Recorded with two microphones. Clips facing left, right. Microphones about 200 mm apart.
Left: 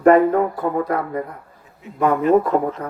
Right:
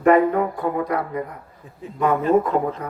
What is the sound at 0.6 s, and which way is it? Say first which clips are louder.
Speech: left 2 dB; 45° left (ahead or behind).